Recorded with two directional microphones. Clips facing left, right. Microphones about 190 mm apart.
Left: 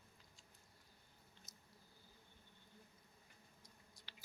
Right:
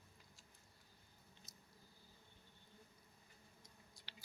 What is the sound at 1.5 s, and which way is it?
Squish, 20° left (ahead or behind).